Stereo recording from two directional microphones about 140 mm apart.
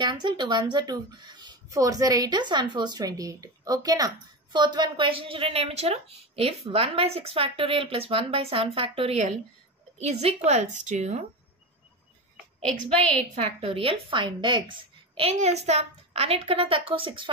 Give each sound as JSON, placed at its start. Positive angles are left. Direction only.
{"t": 0.0, "sound": "a woman's voice", "side_deg": -30}
{"t": 13.3, "sound": "a woman's voice", "side_deg": -45}
{"t": 15.3, "sound": "speech", "side_deg": -50}